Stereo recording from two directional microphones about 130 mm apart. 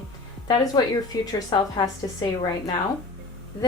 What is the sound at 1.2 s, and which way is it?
Speech, 30° left (ahead or behind).